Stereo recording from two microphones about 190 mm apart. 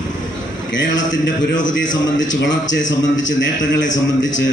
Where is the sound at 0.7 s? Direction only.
75° left (ahead or behind).